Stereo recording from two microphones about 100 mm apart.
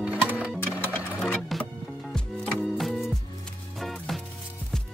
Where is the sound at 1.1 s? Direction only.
5° left (ahead or behind).